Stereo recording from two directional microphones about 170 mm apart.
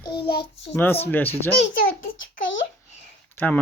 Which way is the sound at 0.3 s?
30° left (ahead or behind).